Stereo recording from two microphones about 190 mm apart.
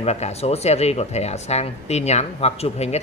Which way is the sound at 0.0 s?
35° left (ahead or behind).